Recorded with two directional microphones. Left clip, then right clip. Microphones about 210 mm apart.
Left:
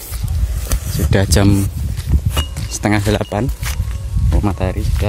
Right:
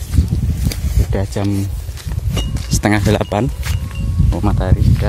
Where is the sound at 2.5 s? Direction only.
5° right (ahead or behind).